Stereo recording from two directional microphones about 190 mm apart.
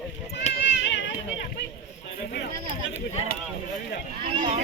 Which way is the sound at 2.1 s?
60° left (ahead or behind).